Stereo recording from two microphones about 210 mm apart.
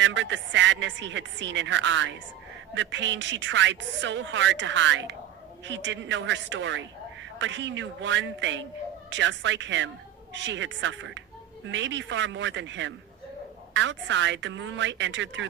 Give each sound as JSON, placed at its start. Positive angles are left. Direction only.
{"t": 0.0, "sound": "a man's voice", "side_deg": -60}